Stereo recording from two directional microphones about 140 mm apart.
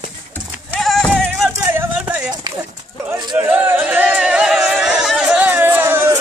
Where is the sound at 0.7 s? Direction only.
5° left (ahead or behind).